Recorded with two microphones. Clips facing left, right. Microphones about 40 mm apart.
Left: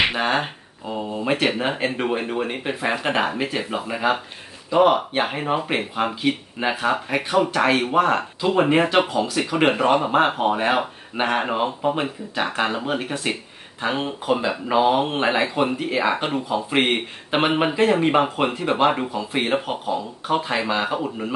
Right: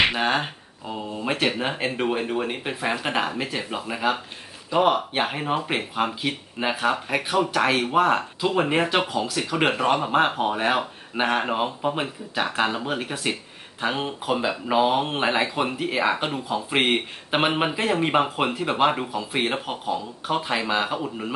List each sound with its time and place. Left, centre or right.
0.0 s speech: centre